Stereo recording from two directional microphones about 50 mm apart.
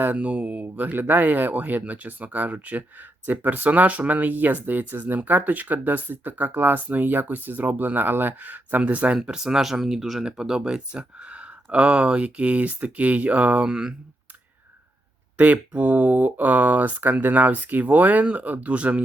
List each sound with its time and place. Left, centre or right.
0.0 s speech: right
9.2 s speech: centre; by 13.7 s right
13.7 s speech: centre
15.4 s speech: right